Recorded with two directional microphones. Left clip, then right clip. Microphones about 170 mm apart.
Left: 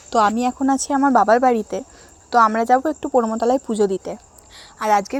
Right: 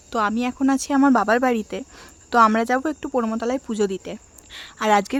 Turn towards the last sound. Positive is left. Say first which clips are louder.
# left 1 dB
turn(degrees=-45)  # may be behind; listen again after turning